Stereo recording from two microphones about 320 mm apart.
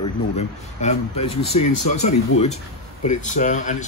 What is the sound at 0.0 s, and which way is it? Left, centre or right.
Speech, left.